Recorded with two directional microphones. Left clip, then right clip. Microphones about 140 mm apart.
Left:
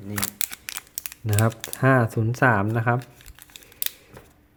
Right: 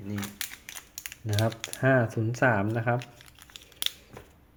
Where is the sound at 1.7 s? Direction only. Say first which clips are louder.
Left 4 dB; 35° left (ahead or behind).